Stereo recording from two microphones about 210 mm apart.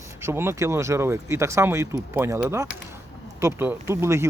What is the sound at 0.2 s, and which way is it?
Speech, 10° right (ahead or behind).